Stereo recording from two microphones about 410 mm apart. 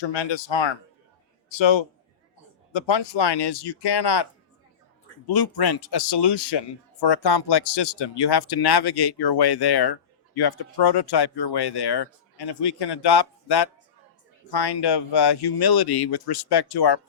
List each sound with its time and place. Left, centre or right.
0.0 s a man's voice: left
5.2 s speech: left